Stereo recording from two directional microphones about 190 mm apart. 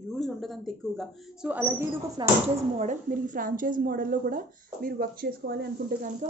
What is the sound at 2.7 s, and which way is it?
A woman's voice, 40° right (ahead or behind).